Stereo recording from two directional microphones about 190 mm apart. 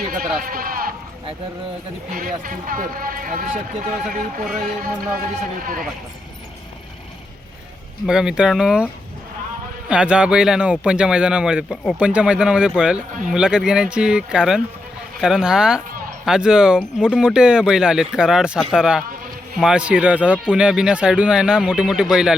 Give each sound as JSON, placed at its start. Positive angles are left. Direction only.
{"t": 0.0, "sound": "bleat", "side_deg": -50}
{"t": 0.3, "sound": "speech", "side_deg": -50}
{"t": 2.1, "sound": "speech", "side_deg": -50}
{"t": 8.0, "sound": "speech", "side_deg": -5}
{"t": 9.9, "sound": "speech", "side_deg": -5}